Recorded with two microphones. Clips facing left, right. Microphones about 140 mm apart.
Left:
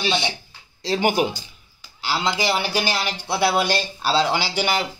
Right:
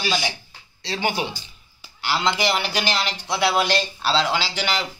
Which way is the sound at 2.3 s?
10° left (ahead or behind).